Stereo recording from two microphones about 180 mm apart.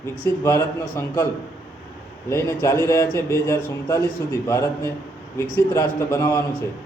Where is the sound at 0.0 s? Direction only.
15° left (ahead or behind).